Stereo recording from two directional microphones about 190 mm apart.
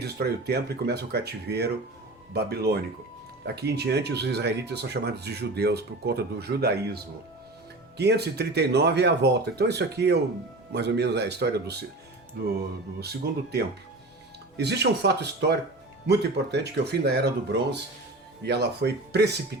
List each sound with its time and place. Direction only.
0.0 s speech: 55° right (ahead or behind)
13.0 s speech: 60° right (ahead or behind)